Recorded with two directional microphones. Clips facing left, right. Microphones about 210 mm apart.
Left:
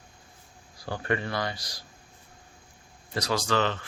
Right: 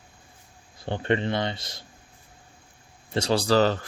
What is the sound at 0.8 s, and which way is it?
Speech, 25° right (ahead or behind).